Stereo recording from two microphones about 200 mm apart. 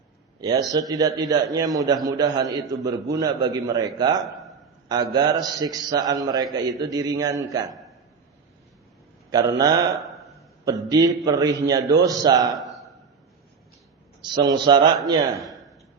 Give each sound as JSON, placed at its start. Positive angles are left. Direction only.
{"t": 0.3, "sound": "a man's voice", "side_deg": -20}
{"t": 9.3, "sound": "a man's voice", "side_deg": -20}
{"t": 14.2, "sound": "a man's voice", "side_deg": -20}